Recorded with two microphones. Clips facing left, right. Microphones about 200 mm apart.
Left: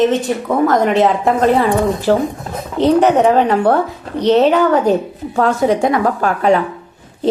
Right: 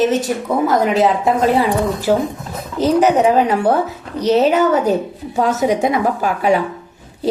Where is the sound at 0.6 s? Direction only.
Centre (ahead or behind).